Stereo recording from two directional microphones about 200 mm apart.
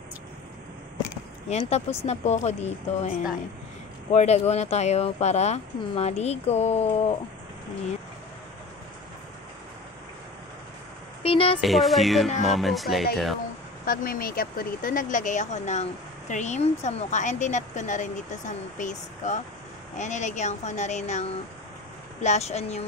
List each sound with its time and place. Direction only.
1.5 s speech: 30° left (ahead or behind)
4.1 s speech: 30° left (ahead or behind)
11.2 s speech: 30° left (ahead or behind)
11.6 s speech: centre (ahead or behind)
13.8 s speech: 45° left (ahead or behind)